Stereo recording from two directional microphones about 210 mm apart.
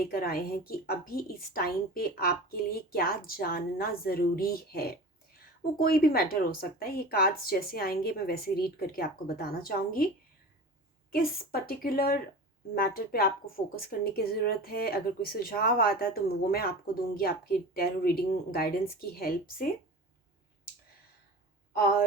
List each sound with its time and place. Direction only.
0.1 s a woman's voice: 45° left (ahead or behind)
11.1 s a woman's voice: 45° left (ahead or behind)